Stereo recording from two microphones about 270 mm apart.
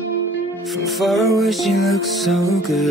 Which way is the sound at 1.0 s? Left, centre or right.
Centre.